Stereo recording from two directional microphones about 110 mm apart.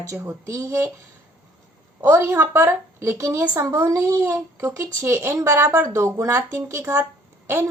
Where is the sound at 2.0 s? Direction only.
20° right (ahead or behind).